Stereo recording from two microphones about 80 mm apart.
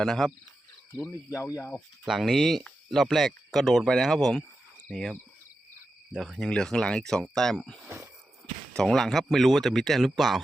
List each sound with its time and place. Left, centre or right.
0.0 s speech: centre
2.0 s speech: centre
6.1 s speech: centre
7.9 s a sound: right
8.7 s speech: centre